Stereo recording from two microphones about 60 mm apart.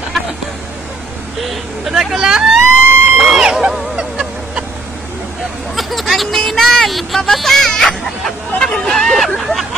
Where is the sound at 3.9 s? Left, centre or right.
Centre.